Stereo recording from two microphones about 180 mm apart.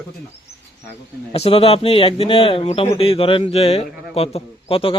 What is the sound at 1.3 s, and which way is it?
A man's voice, 35° left (ahead or behind).